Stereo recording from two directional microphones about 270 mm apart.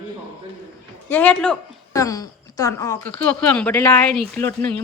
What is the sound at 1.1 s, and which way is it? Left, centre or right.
A woman's voice, centre.